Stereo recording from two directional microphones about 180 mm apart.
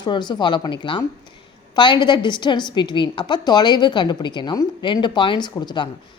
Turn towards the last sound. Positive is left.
turn(degrees=25)  # may be behind; listen again after turning